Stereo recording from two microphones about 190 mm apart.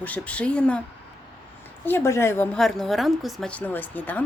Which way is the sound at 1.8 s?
10° left (ahead or behind).